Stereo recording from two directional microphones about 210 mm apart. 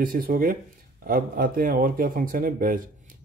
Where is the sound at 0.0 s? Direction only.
40° right (ahead or behind).